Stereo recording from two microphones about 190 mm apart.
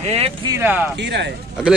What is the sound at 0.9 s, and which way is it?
Speech, 65° right (ahead or behind).